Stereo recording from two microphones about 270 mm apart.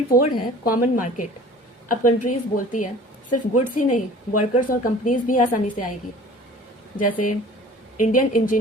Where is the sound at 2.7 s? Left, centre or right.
Left.